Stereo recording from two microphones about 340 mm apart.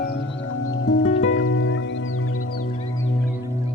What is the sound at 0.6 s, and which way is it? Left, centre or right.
Music, left.